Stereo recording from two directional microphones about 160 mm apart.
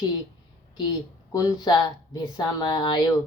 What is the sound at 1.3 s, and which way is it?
Speech, 20° left (ahead or behind).